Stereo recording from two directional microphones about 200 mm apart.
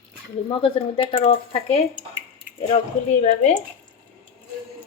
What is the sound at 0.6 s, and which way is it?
Speech, 30° left (ahead or behind).